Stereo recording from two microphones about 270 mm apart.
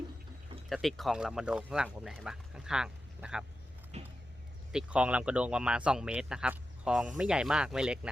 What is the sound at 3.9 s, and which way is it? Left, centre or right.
Vehicle, right.